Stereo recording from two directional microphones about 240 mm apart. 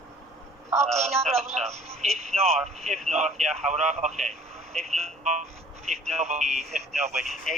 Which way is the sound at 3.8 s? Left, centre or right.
Right.